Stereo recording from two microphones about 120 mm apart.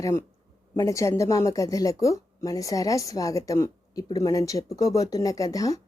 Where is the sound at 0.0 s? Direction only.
20° left (ahead or behind).